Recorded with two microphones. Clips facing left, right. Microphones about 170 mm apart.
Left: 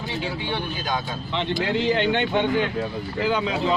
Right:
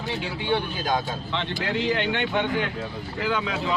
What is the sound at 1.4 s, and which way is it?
Speech, 25° left (ahead or behind).